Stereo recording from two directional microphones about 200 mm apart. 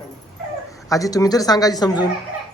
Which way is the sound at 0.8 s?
15° left (ahead or behind).